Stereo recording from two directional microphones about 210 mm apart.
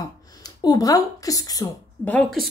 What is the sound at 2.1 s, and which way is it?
Speech, 5° left (ahead or behind).